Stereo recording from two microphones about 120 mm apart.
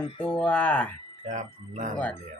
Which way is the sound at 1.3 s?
90° right.